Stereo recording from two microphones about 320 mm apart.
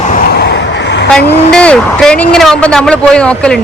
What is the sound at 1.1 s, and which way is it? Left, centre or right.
Speech, centre.